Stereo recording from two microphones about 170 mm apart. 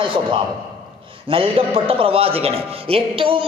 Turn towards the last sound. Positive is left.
turn(degrees=-30)  # may be behind; listen again after turning